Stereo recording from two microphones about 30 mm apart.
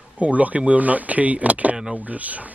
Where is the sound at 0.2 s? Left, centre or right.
Right.